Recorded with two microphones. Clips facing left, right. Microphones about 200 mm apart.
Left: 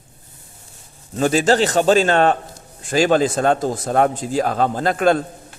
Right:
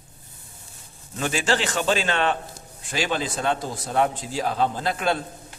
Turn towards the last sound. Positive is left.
turn(degrees=50)  # may be behind; listen again after turning